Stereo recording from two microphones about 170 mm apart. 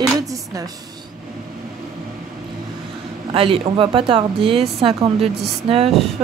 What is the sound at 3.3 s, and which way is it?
Speech, 30° right (ahead or behind).